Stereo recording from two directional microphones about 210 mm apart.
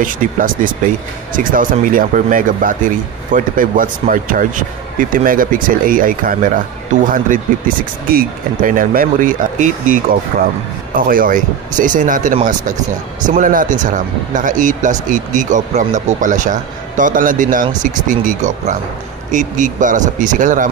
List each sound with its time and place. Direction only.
0.0 s speech: 40° right (ahead or behind)
11.0 s speech: 40° right (ahead or behind)